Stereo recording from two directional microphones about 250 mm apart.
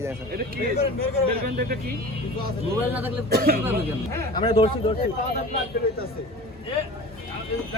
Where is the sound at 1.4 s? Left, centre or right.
Right.